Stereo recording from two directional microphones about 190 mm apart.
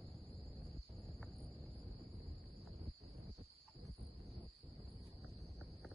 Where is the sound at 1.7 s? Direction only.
30° right (ahead or behind).